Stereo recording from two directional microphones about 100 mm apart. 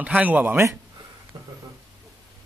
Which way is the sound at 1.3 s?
55° right (ahead or behind).